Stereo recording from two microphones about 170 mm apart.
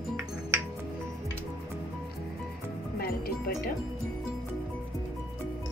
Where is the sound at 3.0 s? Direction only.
60° left (ahead or behind).